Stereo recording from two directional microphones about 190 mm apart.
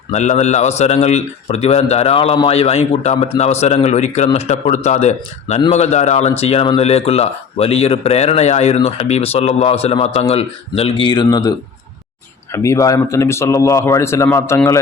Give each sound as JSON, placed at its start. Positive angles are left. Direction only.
{"t": 0.1, "sound": "a man's voice", "side_deg": 35}